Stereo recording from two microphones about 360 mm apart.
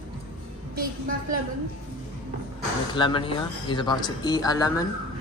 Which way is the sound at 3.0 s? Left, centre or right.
Centre.